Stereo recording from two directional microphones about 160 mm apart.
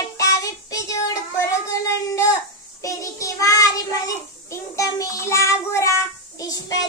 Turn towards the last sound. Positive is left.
turn(degrees=20)  # may be behind; listen again after turning